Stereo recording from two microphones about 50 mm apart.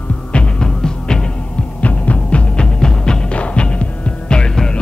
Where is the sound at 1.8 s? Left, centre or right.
Left.